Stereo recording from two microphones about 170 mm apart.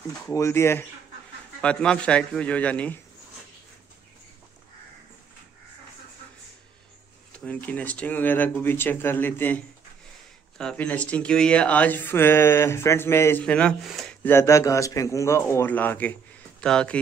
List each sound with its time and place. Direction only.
0.3 s speech: 15° left (ahead or behind)
7.3 s speech: 10° left (ahead or behind)
10.6 s speech: 5° left (ahead or behind)
14.3 s speech: 15° left (ahead or behind)